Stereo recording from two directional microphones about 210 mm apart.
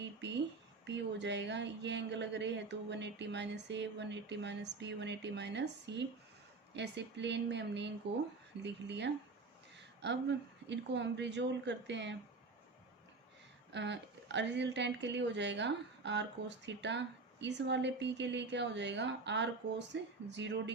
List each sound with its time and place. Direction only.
0.9 s speech: 55° right (ahead or behind)
13.7 s speech: 55° right (ahead or behind)